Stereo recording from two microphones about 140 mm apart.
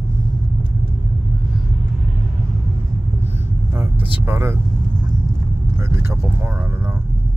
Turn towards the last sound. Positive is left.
turn(degrees=-20)  # may be behind; listen again after turning